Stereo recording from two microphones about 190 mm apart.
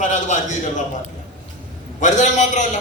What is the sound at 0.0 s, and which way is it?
Speech, 40° left (ahead or behind).